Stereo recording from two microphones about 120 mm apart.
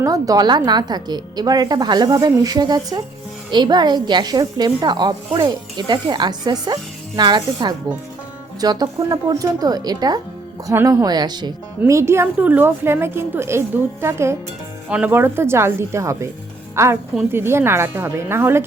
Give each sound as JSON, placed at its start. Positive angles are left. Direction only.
{"t": 0.0, "sound": "speech", "side_deg": -30}
{"t": 11.9, "sound": "a woman's voice", "side_deg": -25}